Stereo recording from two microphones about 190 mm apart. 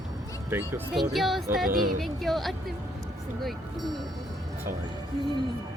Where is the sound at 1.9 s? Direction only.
Centre (ahead or behind).